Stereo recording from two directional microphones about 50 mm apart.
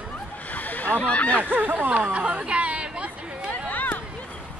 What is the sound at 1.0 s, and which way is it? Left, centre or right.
Speech, left.